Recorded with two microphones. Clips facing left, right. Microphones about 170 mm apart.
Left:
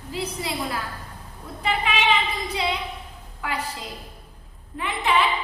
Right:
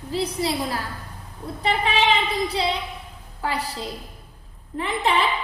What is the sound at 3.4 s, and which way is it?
Speech, 35° right (ahead or behind).